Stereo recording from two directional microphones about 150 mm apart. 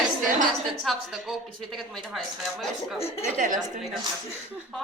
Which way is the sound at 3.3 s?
60° right (ahead or behind).